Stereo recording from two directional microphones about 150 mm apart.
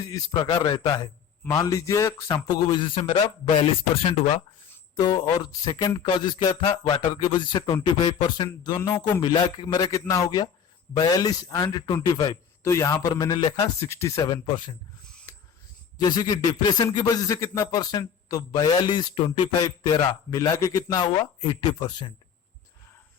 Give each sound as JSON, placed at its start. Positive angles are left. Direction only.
{"t": 0.0, "sound": "speech", "side_deg": 25}
{"t": 4.9, "sound": "speech", "side_deg": 30}
{"t": 14.3, "sound": "speech", "side_deg": 30}
{"t": 16.0, "sound": "speech", "side_deg": 25}
{"t": 20.3, "sound": "speech", "side_deg": 25}